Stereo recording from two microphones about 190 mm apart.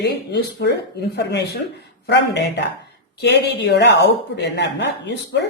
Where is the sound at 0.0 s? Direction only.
60° left (ahead or behind).